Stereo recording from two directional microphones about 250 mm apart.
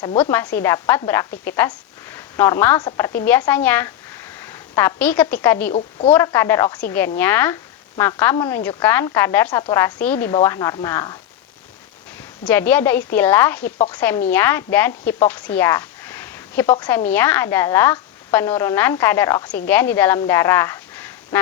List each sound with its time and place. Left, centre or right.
0.2 s a woman's voice: centre
5.7 s speech: left
6.1 s a woman's voice: centre
12.5 s a woman's voice: centre
13.7 s speech: left
13.9 s a woman's voice: centre